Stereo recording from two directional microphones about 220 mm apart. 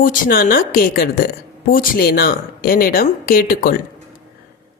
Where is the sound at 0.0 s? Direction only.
40° left (ahead or behind).